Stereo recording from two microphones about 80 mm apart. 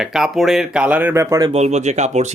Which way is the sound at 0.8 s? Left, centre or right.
Centre.